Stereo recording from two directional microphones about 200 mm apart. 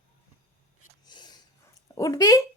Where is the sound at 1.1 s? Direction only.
20° left (ahead or behind).